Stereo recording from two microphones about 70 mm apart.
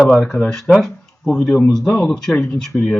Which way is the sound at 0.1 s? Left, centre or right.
Centre.